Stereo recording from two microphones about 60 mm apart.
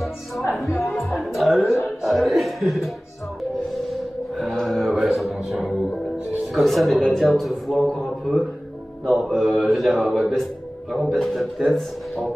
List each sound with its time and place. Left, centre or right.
0.7 s speech: left
1.1 s a man's voice: centre
3.7 s music: centre
6.4 s a man's voice: centre